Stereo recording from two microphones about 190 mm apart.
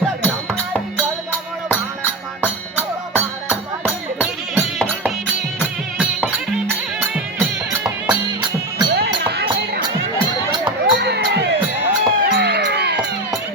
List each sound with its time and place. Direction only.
2.4 s music: 10° right (ahead or behind)
7.9 s music: 20° right (ahead or behind)
9.0 s music: 55° right (ahead or behind)
10.9 s music: 60° right (ahead or behind)